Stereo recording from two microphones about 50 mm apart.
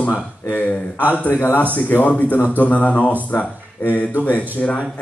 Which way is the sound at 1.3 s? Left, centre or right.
Left.